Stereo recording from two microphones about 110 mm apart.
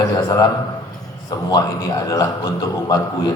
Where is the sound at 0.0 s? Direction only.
35° left (ahead or behind).